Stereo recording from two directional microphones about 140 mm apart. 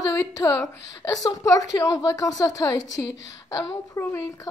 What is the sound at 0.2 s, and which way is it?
A woman's voice, 20° left (ahead or behind).